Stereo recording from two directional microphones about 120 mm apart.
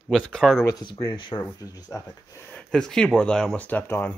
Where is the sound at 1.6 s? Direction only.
30° left (ahead or behind).